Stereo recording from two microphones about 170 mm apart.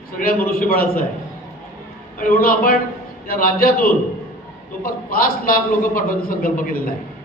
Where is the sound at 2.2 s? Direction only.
60° left (ahead or behind).